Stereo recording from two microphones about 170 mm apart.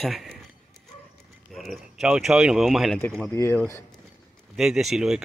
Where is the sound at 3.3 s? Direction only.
15° left (ahead or behind).